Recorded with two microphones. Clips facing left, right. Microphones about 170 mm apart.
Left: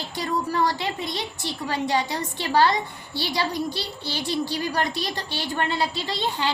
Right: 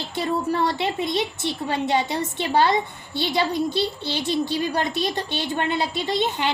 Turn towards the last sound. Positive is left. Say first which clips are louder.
# right 3 dB
turn(degrees=-20)  # may be behind; listen again after turning